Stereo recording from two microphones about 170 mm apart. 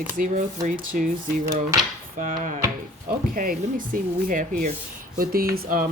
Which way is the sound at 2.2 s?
50° right (ahead or behind).